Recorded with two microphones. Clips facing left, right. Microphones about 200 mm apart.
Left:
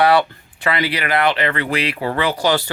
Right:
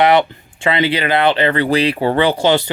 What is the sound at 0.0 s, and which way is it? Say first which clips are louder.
Speech: right 2 dB; 20° right (ahead or behind).